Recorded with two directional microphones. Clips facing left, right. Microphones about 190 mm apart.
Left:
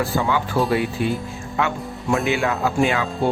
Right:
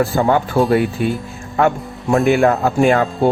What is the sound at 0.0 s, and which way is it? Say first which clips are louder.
Speech: right 6 dB; 45° right (ahead or behind).